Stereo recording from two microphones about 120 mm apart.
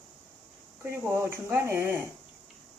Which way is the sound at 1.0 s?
20° right (ahead or behind).